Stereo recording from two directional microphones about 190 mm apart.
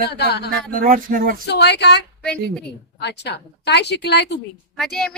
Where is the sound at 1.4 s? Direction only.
60° left (ahead or behind).